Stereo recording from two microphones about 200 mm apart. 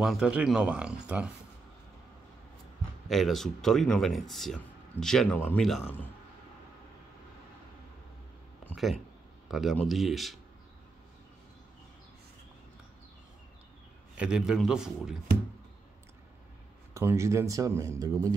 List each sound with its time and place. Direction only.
0.0 s speech: 5° right (ahead or behind)
3.1 s speech: centre (ahead or behind)
8.6 s speech: centre (ahead or behind)
14.1 s speech: 5° right (ahead or behind)
16.9 s speech: 15° right (ahead or behind)